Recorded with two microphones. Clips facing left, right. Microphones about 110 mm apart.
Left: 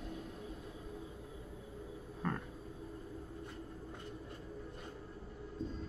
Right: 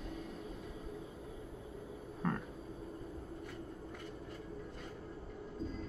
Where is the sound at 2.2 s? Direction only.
Centre (ahead or behind).